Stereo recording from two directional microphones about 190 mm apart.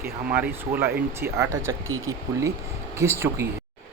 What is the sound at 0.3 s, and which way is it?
Speech, 10° right (ahead or behind).